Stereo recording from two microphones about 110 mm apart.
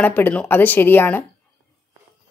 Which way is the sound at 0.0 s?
15° left (ahead or behind).